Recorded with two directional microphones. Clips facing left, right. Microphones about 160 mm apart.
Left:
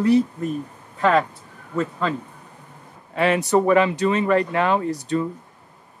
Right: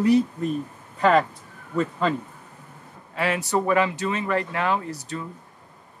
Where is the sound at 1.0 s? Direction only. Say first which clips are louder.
Even; 5° right (ahead or behind).